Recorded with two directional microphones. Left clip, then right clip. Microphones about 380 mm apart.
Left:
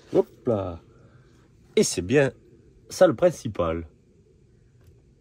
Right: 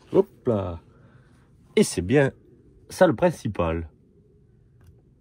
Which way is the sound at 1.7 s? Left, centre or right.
Centre.